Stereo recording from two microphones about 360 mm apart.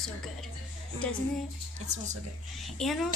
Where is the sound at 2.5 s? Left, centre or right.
Centre.